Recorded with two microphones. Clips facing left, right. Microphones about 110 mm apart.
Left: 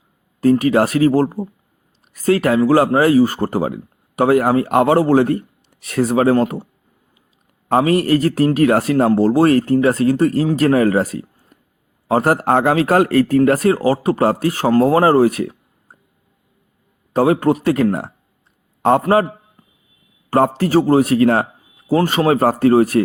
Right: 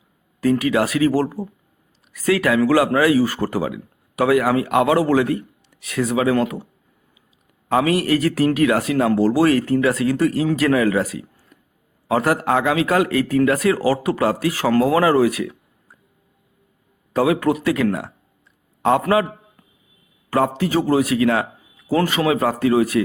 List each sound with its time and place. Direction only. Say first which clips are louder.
0.6 s speech: left 4 dB; 40° left (ahead or behind)
2.1 s speech: left 3 dB; 40° left (ahead or behind)
7.7 s speech: left 3 dB; 35° left (ahead or behind)
9.2 s speech: left 3 dB; 30° left (ahead or behind)
13.7 s speech: left 2 dB; 25° left (ahead or behind)
14.1 s speech: left 3 dB; 40° left (ahead or behind)
17.2 s speech: left 3 dB; 35° left (ahead or behind)
20.3 s speech: left 4 dB; 40° left (ahead or behind)
21.8 s speech: left 3 dB; 30° left (ahead or behind)